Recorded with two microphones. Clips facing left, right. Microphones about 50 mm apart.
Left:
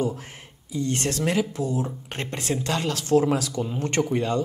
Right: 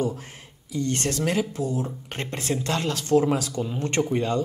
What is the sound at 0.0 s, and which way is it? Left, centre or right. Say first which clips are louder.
Speech: even; left.